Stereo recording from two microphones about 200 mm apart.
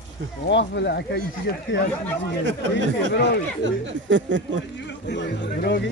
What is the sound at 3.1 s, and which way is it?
Speech, 55° left (ahead or behind).